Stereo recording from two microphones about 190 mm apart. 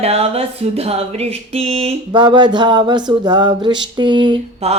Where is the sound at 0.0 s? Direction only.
30° right (ahead or behind).